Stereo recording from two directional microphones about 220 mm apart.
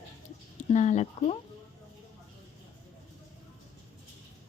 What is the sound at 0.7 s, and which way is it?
Speech, 30° left (ahead or behind).